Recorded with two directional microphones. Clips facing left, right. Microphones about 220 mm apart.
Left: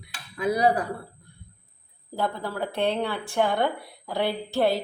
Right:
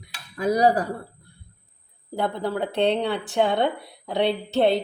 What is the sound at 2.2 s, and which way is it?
Speech, 20° right (ahead or behind).